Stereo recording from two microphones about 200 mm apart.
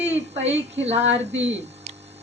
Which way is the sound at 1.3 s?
65° right (ahead or behind).